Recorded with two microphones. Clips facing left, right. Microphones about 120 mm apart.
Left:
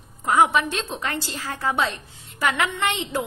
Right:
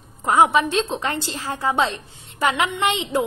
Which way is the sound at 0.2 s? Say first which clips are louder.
Right 2 dB; 25° right (ahead or behind).